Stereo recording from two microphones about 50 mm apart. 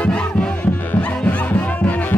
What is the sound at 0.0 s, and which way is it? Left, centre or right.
Music, left.